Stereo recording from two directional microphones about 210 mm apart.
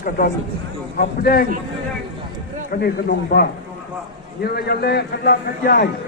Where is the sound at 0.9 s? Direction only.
45° left (ahead or behind).